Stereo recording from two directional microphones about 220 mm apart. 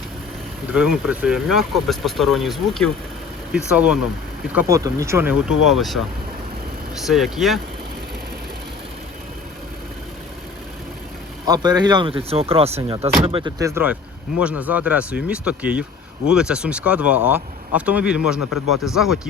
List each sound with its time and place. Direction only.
0.7 s speech: 5° right (ahead or behind)
11.4 s speech: 15° right (ahead or behind); by 19.3 s centre (ahead or behind)